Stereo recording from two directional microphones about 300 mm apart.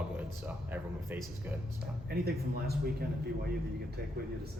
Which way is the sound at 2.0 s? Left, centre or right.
Right.